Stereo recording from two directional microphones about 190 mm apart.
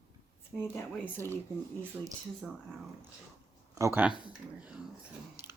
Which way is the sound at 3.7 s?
15° right (ahead or behind).